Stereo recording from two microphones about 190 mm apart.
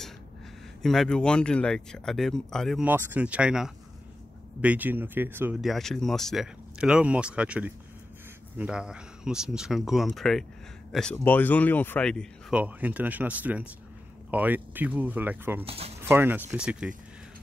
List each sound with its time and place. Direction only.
0.8 s speech: 5° left (ahead or behind)
2.8 s speech: 10° right (ahead or behind)
5.6 s speech: centre (ahead or behind)
12.5 s speech: 10° right (ahead or behind)
15.6 s speech: 30° right (ahead or behind)
16.0 s speech: 10° right (ahead or behind)